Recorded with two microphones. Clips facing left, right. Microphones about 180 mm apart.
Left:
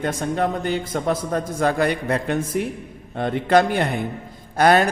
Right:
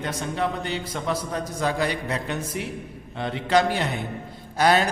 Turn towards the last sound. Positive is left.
turn(degrees=55)  # may be behind; listen again after turning